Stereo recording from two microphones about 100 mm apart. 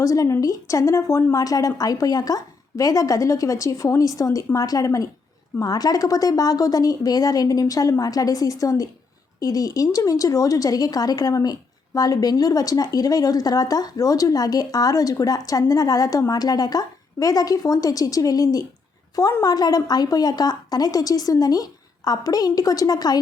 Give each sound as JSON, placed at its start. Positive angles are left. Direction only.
{"t": 0.0, "sound": "a woman's voice", "side_deg": 30}